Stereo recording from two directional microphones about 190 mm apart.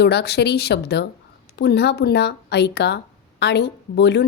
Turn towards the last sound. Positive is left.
turn(degrees=60)  # may be behind; listen again after turning